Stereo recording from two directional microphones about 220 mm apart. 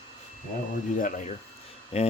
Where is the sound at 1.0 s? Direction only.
35° left (ahead or behind).